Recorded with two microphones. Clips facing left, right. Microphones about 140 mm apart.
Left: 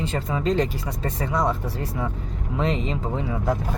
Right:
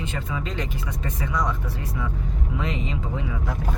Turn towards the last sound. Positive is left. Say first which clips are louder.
# left 5 dB
turn(degrees=35)  # may be behind; listen again after turning